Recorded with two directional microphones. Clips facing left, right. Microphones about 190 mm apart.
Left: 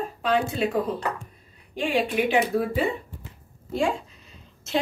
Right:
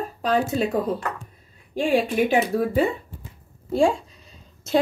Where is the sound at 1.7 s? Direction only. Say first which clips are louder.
Right 4 dB; 40° right (ahead or behind).